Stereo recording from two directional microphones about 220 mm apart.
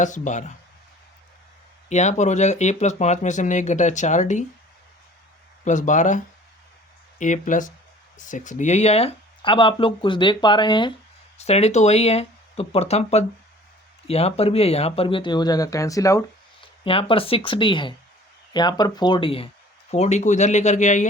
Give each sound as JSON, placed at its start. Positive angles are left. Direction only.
{"t": 0.0, "sound": "speech", "side_deg": 35}
{"t": 1.9, "sound": "speech", "side_deg": 30}
{"t": 5.6, "sound": "speech", "side_deg": 35}